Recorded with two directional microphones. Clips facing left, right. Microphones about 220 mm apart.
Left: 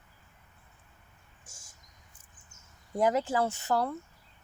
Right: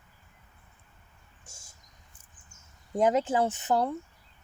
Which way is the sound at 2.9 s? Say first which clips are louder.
Right 2 dB; 20° right (ahead or behind).